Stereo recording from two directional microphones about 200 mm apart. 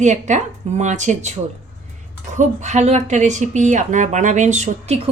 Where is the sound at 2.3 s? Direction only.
35° right (ahead or behind).